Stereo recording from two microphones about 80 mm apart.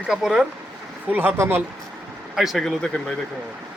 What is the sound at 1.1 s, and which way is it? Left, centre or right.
Speech, right.